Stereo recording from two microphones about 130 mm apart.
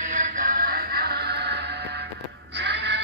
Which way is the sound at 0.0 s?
80° right.